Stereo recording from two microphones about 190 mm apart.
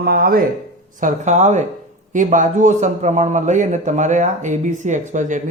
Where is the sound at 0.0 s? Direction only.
50° right (ahead or behind).